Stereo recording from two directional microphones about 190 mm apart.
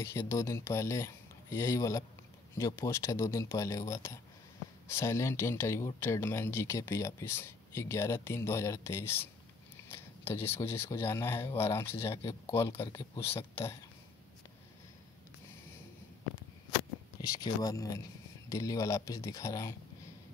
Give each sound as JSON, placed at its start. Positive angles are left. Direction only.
{"t": 0.0, "sound": "speech", "side_deg": 15}
{"t": 17.2, "sound": "speech", "side_deg": 20}